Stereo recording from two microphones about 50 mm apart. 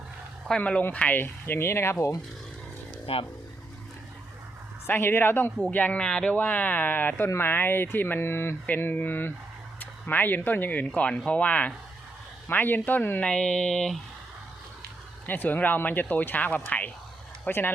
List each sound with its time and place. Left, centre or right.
0.5 s speech: centre
0.9 s speech: left
1.2 s speech: left
4.9 s speech: left
5.7 s speech: left
6.0 s speech: centre
6.3 s speech: left
8.8 s speech: left
12.5 s speech: left
13.2 s speech: centre
15.3 s speech: left